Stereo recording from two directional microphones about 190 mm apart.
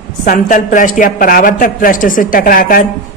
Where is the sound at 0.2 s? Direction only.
45° left (ahead or behind).